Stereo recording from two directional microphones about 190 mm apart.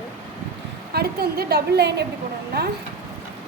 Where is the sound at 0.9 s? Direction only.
55° right (ahead or behind).